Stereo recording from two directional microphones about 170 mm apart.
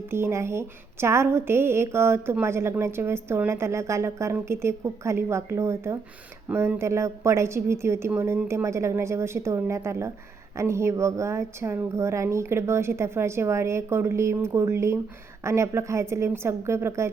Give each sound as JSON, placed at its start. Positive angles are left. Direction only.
{"t": 0.1, "sound": "a woman's voice", "side_deg": -15}